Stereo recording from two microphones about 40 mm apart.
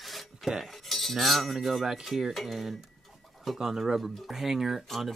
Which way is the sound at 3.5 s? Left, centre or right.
Centre.